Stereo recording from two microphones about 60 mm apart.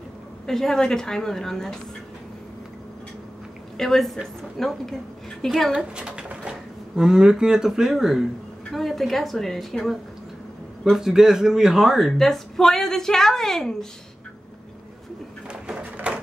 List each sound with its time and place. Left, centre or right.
0.5 s a woman's voice: centre
3.7 s a woman's voice: centre
5.7 s a man's voice: centre
12.2 s a woman's voice: centre
15.6 s a sound: centre